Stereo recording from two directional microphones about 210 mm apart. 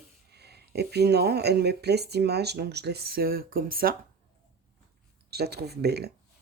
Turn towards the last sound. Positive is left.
turn(degrees=-50)  # may be behind; listen again after turning